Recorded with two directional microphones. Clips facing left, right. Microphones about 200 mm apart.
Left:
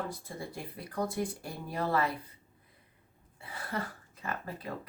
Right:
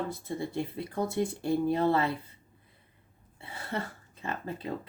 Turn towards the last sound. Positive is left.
turn(degrees=-25)  # may be behind; listen again after turning